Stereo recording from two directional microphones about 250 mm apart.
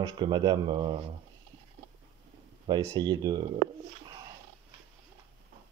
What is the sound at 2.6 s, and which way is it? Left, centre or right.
Speech, centre.